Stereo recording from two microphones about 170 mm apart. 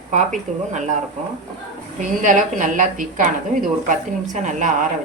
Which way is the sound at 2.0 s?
50° right (ahead or behind).